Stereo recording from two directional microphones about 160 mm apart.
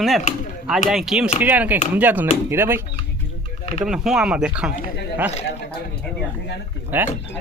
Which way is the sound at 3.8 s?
5° right (ahead or behind).